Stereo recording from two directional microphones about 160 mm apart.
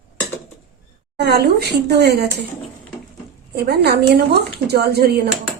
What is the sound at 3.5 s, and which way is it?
A woman's voice, 90° right.